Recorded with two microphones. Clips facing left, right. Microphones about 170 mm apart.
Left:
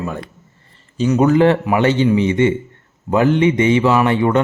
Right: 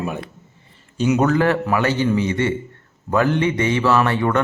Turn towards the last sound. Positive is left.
turn(degrees=20)  # may be behind; listen again after turning